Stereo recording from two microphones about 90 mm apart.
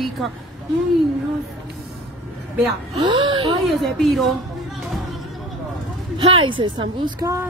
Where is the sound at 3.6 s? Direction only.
Centre (ahead or behind).